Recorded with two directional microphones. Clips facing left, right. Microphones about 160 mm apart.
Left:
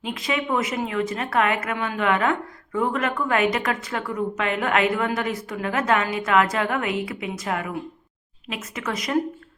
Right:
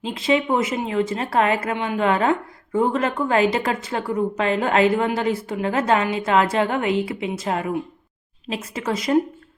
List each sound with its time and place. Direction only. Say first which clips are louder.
0.0 s a woman's voice: right 6 dB; 30° right (ahead or behind)